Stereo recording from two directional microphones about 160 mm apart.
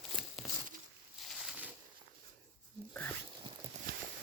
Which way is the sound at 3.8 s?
45° right (ahead or behind).